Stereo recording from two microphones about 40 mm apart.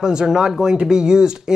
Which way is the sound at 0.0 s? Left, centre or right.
Centre.